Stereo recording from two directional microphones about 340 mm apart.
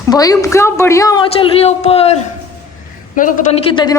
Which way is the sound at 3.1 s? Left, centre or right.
Left.